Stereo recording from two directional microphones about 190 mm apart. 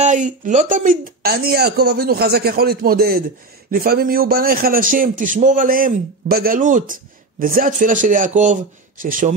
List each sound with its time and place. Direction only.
0.0 s a man's voice: 40° right (ahead or behind)